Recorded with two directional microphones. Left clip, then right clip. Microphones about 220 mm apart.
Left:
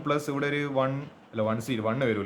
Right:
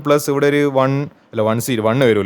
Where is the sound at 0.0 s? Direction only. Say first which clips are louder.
Right 13 dB; 50° right (ahead or behind).